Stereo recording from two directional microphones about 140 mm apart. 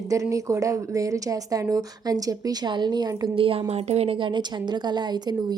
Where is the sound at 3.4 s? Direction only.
40° right (ahead or behind).